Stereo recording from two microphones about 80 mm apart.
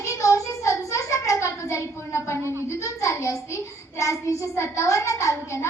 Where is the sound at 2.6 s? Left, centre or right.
Left.